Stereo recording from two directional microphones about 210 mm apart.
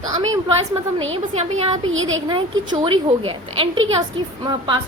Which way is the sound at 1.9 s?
65° right (ahead or behind).